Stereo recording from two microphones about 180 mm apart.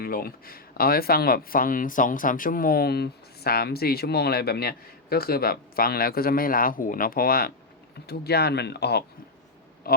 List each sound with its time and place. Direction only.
0.0 s speech: 55° left (ahead or behind)